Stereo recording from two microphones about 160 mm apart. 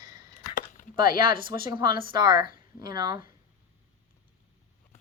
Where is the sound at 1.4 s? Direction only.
30° right (ahead or behind).